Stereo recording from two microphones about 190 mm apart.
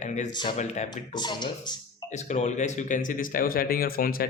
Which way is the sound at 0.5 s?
35° left (ahead or behind).